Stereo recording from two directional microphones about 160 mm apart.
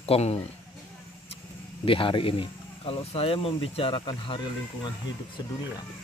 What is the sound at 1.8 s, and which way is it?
Speech, 35° left (ahead or behind).